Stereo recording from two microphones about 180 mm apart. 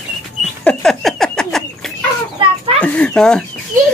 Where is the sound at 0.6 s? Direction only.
Centre (ahead or behind).